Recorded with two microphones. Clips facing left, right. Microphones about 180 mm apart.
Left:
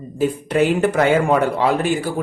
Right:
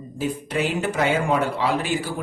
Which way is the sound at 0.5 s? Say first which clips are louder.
Left 8 dB; 55° left (ahead or behind).